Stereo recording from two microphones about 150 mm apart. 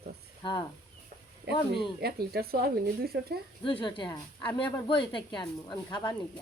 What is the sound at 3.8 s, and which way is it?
Speech, 30° left (ahead or behind).